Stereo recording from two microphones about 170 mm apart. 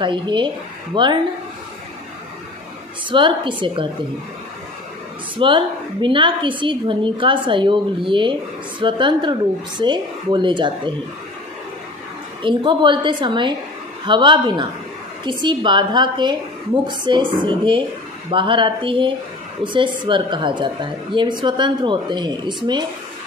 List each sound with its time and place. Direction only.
0.0 s a woman's voice: 30° right (ahead or behind)
3.1 s a woman's voice: 30° right (ahead or behind)
5.4 s a woman's voice: 30° right (ahead or behind)
12.4 s a woman's voice: 30° right (ahead or behind)